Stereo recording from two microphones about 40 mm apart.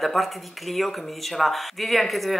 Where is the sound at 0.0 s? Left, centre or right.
Centre.